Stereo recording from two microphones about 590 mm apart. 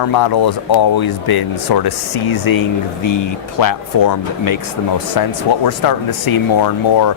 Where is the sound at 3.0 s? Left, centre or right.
Left.